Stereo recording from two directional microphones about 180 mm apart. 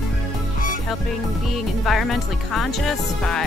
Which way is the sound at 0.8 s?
Centre (ahead or behind).